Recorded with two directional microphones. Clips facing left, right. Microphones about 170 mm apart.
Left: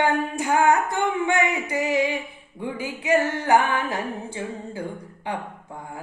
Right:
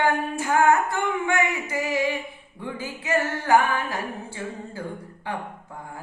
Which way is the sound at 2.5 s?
15° left (ahead or behind).